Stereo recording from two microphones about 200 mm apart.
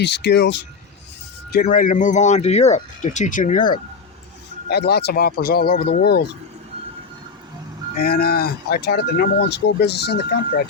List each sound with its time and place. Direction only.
0.0 s speech: 55° left (ahead or behind)
1.5 s speech: 50° left (ahead or behind)
4.7 s speech: 55° left (ahead or behind)
8.0 s speech: 50° left (ahead or behind)